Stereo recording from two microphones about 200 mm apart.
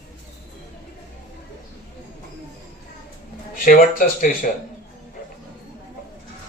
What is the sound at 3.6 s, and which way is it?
Speech, 45° left (ahead or behind).